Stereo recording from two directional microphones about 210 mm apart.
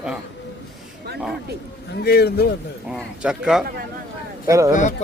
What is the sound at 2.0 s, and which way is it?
Speech, 45° left (ahead or behind).